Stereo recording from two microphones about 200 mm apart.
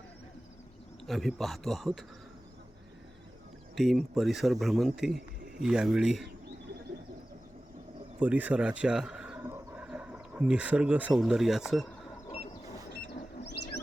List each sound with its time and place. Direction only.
1.0 s speech: centre (ahead or behind)
3.8 s speech: centre (ahead or behind)
8.2 s speech: 10° right (ahead or behind)
13.4 s bird: 55° left (ahead or behind)